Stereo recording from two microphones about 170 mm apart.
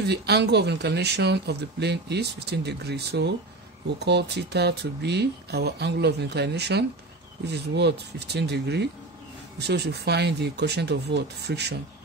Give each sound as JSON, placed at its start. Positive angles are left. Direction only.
{"t": 0.0, "sound": "speech", "side_deg": -80}